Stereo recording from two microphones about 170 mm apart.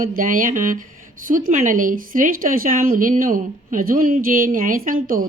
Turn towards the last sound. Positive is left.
turn(degrees=-55)  # may be behind; listen again after turning